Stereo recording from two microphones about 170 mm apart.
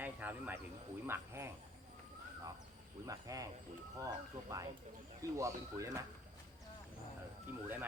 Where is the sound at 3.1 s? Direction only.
20° right (ahead or behind).